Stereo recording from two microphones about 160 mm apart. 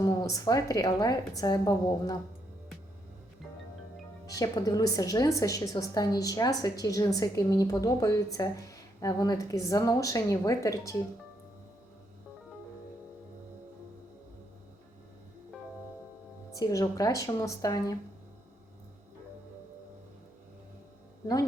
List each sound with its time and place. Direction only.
0.0 s a woman's voice: 20° left (ahead or behind)
4.3 s a woman's voice: 20° left (ahead or behind)
16.6 s a woman's voice: 20° left (ahead or behind)